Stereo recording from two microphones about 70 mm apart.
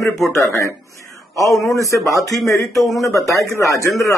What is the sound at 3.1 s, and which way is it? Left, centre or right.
Speech, left.